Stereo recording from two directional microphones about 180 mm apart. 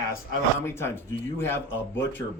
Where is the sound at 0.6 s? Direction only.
15° left (ahead or behind).